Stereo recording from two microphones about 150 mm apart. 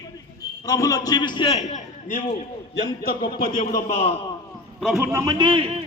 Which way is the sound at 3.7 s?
45° left (ahead or behind).